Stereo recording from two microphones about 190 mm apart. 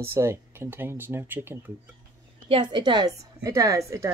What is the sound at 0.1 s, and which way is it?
A woman's voice, 15° right (ahead or behind).